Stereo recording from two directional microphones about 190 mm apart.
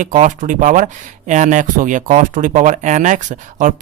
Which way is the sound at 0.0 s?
45° right (ahead or behind).